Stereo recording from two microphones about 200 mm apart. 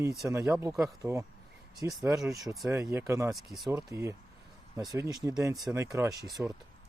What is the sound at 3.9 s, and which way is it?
Speech, 15° right (ahead or behind).